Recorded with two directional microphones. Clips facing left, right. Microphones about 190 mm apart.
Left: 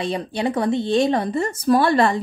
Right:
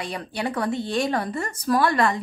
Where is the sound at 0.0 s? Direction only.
25° left (ahead or behind).